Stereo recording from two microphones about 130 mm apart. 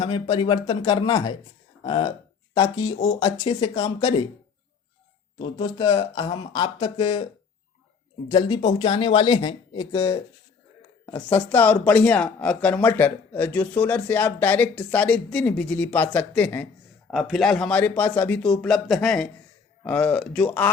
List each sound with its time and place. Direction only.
0.0 s speech: 45° left (ahead or behind)
5.4 s speech: 40° left (ahead or behind)
8.3 s speech: 40° left (ahead or behind)
11.0 s speech: 20° left (ahead or behind)
17.1 s speech: centre (ahead or behind)